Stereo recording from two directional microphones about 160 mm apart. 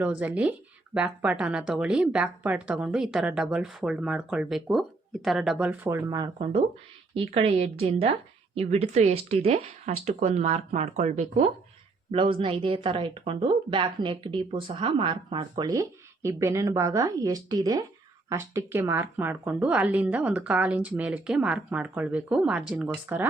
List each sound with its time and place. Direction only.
0.0 s a woman's voice: 10° right (ahead or behind)
6.1 s a woman's voice: 25° right (ahead or behind)